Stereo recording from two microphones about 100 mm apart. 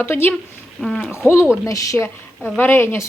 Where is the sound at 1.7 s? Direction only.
30° left (ahead or behind).